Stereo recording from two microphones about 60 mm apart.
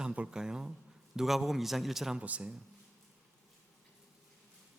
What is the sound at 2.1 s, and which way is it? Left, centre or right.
Speech, right.